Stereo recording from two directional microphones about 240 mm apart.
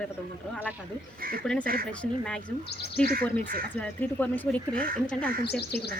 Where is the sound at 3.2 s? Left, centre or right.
Centre.